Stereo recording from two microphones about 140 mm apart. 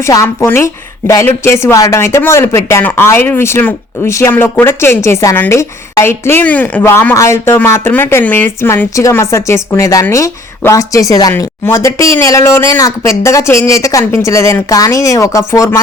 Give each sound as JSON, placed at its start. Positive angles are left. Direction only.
{"t": 0.0, "sound": "a woman's voice", "side_deg": 20}